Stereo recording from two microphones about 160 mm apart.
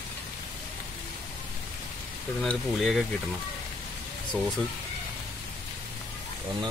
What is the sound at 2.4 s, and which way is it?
Speech, centre (ahead or behind).